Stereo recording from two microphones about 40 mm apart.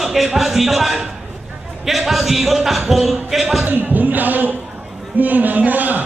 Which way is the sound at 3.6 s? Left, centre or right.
Right.